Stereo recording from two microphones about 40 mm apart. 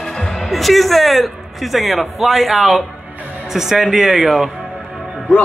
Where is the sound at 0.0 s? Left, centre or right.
Centre.